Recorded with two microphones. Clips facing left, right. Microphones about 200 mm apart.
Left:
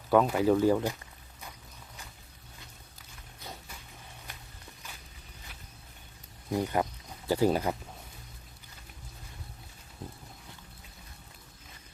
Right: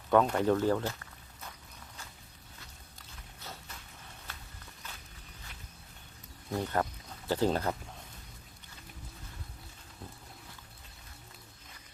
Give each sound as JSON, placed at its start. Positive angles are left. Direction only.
{"t": 0.1, "sound": "speech", "side_deg": 5}
{"t": 3.4, "sound": "a sound", "side_deg": 15}
{"t": 4.3, "sound": "walk", "side_deg": 15}
{"t": 6.5, "sound": "speech", "side_deg": 10}